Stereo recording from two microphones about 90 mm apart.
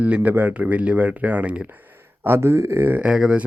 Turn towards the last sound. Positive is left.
turn(degrees=-10)  # may be behind; listen again after turning